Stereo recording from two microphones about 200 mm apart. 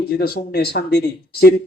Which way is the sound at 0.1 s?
50° left (ahead or behind).